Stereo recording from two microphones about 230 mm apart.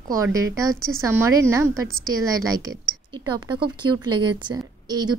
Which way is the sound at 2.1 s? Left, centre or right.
Right.